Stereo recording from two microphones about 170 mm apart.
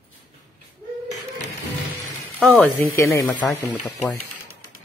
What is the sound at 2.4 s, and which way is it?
Speech, centre (ahead or behind).